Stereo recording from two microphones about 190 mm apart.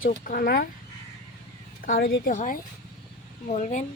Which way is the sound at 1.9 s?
50° left (ahead or behind).